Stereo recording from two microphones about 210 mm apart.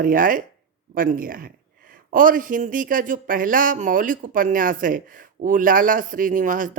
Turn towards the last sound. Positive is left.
turn(degrees=-40)  # may be behind; listen again after turning